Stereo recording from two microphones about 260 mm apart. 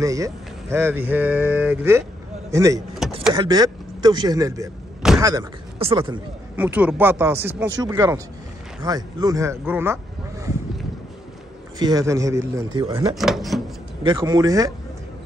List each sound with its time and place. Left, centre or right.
0.0 s speech: centre
3.0 s a sound: centre
3.3 s speech: centre
6.5 s speech: centre
11.8 s speech: centre
13.1 s speech: centre
14.0 s speech: centre